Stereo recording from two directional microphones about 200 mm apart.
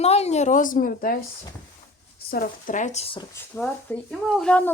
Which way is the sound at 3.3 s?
10° left (ahead or behind).